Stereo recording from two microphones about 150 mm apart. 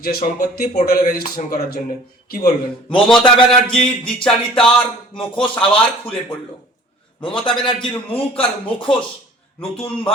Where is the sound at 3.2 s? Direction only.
35° left (ahead or behind).